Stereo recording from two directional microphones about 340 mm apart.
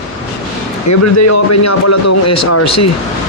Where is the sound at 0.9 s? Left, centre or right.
Left.